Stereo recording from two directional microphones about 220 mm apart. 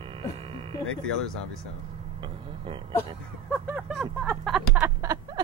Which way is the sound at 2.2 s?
20° right (ahead or behind).